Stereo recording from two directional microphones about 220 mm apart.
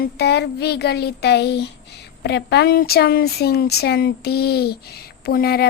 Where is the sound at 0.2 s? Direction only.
50° left (ahead or behind).